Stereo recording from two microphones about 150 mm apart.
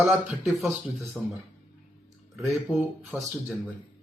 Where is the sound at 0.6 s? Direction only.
Centre (ahead or behind).